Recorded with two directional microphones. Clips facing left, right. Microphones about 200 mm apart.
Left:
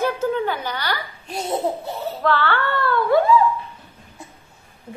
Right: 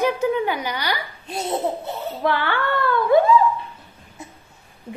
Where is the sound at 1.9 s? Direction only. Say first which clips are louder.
Left 1 dB; 15° right (ahead or behind).